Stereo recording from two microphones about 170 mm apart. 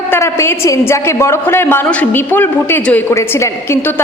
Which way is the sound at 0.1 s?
15° left (ahead or behind).